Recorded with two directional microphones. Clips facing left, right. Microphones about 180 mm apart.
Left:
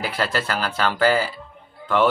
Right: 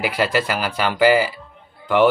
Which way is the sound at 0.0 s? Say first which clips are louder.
Right 4 dB; 10° right (ahead or behind).